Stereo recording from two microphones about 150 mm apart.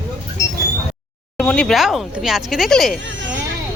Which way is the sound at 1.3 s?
5° left (ahead or behind).